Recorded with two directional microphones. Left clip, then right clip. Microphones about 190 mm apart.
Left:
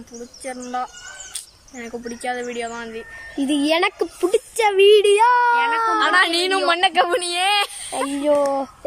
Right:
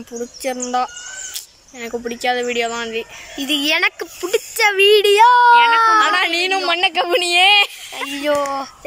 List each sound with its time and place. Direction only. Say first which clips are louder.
0.4 s speech: right 7 dB; 10° right (ahead or behind)
3.3 s a woman's voice: right 2 dB; 20° left (ahead or behind); by 8.0 s 15° right (ahead or behind)
8.3 s speech: left 1 dB; centre (ahead or behind)